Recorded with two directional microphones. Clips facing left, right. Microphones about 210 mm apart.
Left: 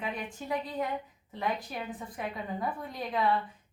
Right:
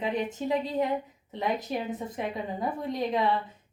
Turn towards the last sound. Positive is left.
turn(degrees=-20)  # may be behind; listen again after turning